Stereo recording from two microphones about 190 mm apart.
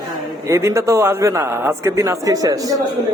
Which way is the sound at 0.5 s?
15° right (ahead or behind).